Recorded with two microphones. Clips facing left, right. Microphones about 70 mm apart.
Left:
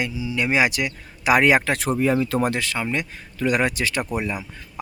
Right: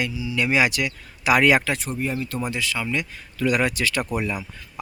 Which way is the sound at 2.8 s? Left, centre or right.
Left.